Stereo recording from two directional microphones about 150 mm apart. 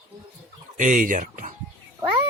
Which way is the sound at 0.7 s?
60° right (ahead or behind).